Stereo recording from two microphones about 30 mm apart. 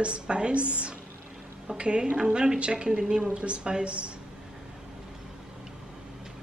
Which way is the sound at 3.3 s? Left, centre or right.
Right.